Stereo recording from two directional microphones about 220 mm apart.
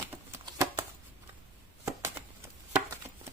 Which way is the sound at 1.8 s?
10° right (ahead or behind).